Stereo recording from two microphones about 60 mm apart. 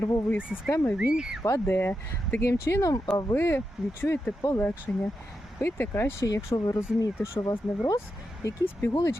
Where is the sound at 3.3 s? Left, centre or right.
Left.